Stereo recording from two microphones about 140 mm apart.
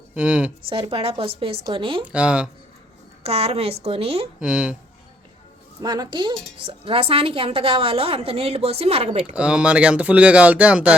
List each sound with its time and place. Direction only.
0.1 s speech: 10° right (ahead or behind)
0.7 s a woman's voice: 40° right (ahead or behind)
2.1 s speech: 10° right (ahead or behind)
3.2 s a woman's voice: 45° right (ahead or behind)
4.4 s speech: 10° right (ahead or behind)
5.8 s a woman's voice: 30° right (ahead or behind); by 9.3 s 50° right (ahead or behind)
9.3 s speech: 10° right (ahead or behind)